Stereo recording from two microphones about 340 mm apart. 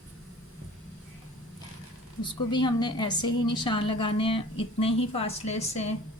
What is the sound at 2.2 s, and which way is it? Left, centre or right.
A woman's voice, centre.